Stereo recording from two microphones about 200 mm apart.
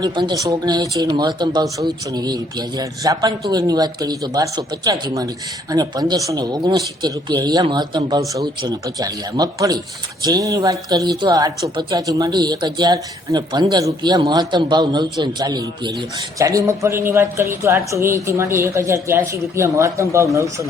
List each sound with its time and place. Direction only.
0.0 s speech: 20° right (ahead or behind)